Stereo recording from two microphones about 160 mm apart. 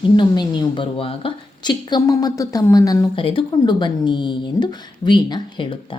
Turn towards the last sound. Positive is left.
turn(degrees=30)  # may be behind; listen again after turning